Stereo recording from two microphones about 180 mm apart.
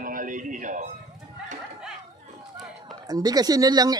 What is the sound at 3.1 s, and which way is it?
Speech, 20° right (ahead or behind).